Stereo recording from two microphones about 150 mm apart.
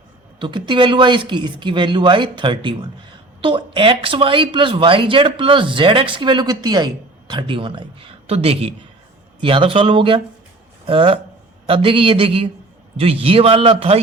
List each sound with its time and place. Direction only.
0.3 s speech: 30° right (ahead or behind)